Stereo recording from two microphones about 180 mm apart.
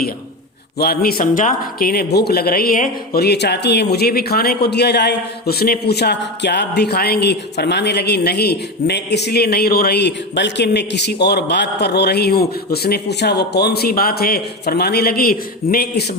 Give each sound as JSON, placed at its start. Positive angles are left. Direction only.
{"t": 0.8, "sound": "speech", "side_deg": 60}